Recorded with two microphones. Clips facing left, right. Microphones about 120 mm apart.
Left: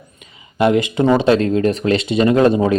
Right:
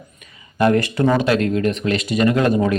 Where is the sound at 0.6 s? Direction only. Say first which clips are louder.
Left 2 dB; 20° left (ahead or behind).